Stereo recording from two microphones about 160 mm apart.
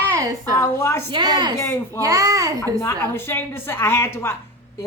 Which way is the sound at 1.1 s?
25° right (ahead or behind).